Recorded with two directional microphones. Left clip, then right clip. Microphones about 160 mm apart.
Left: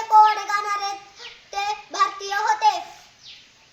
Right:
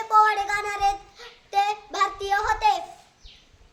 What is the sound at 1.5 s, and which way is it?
Child singing, 30° right (ahead or behind).